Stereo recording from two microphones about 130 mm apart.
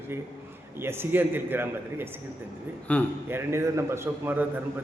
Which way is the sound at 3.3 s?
20° right (ahead or behind).